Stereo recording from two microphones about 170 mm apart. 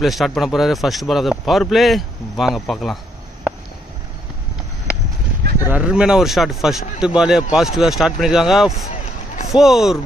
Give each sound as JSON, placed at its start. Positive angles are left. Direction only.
{"t": 0.0, "sound": "speech", "side_deg": 0}
{"t": 5.7, "sound": "speech", "side_deg": -5}